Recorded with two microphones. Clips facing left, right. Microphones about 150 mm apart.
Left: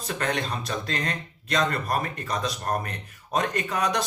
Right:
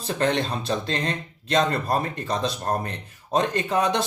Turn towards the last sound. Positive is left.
turn(degrees=-25)  # may be behind; listen again after turning